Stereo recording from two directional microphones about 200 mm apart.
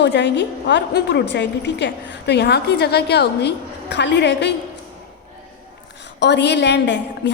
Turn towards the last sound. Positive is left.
turn(degrees=60)  # may be behind; listen again after turning